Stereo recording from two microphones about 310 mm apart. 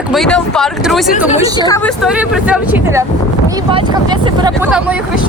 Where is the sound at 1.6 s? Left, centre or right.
Centre.